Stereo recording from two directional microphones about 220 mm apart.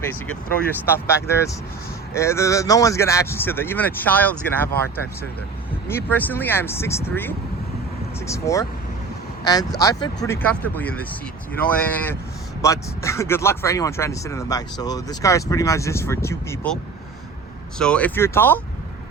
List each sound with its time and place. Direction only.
0.9 s speech: 10° left (ahead or behind)
5.9 s speech: 10° left (ahead or behind)
17.7 s speech: 5° left (ahead or behind)